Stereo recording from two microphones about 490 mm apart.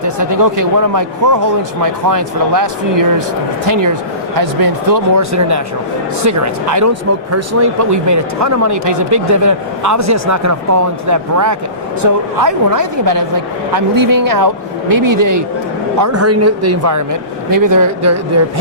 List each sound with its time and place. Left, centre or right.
0.0 s speech: right
3.7 s speech: right
16.0 s speech: right